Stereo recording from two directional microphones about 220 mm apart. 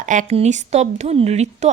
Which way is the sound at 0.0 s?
35° right (ahead or behind).